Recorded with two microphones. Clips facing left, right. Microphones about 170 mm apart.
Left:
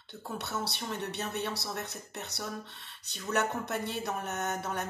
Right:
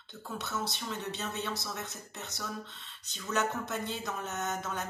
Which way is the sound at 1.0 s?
65° left (ahead or behind).